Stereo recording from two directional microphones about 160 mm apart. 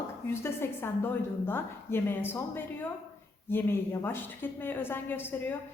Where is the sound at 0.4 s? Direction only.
15° left (ahead or behind).